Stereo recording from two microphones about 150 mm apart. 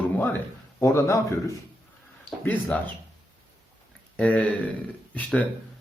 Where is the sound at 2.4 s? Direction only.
10° left (ahead or behind).